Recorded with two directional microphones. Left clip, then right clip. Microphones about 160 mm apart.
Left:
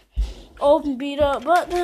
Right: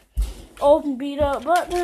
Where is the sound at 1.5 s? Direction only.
30° left (ahead or behind).